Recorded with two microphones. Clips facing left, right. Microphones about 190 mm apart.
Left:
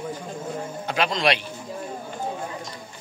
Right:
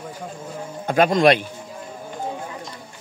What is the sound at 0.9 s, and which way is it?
Speech, 50° right (ahead or behind).